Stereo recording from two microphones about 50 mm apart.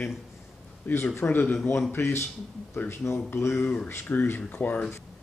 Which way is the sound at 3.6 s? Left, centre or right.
Left.